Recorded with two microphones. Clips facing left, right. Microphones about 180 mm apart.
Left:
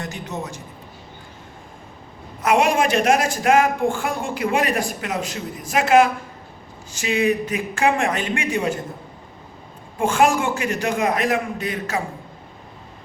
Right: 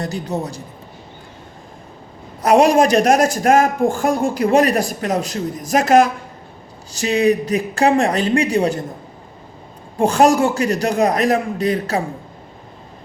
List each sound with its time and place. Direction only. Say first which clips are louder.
0.0 s a man's voice: right 6 dB; 35° right (ahead or behind)
2.4 s speech: right 6 dB; 35° right (ahead or behind)
10.0 s speech: right 5 dB; 40° right (ahead or behind)